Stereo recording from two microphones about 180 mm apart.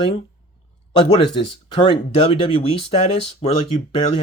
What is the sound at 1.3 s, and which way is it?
Speech, 30° left (ahead or behind).